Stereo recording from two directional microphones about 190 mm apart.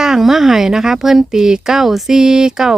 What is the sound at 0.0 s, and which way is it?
Speech, centre (ahead or behind).